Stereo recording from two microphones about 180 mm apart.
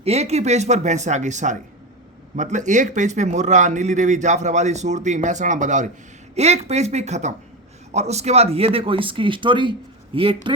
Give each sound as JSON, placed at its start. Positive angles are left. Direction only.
{"t": 0.0, "sound": "speech", "side_deg": -35}